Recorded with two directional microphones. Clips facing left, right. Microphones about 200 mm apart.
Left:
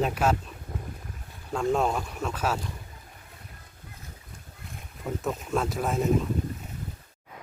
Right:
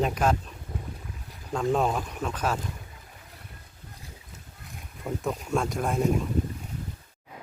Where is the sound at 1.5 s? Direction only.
5° right (ahead or behind).